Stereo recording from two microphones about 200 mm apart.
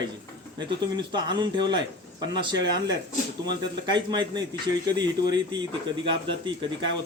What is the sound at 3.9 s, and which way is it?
Speech, 20° right (ahead or behind).